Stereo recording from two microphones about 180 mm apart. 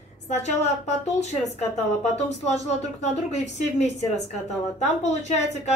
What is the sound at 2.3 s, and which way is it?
A woman's voice, 40° left (ahead or behind).